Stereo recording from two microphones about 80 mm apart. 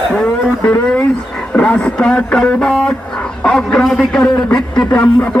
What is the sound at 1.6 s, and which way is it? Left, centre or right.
A man's voice, centre.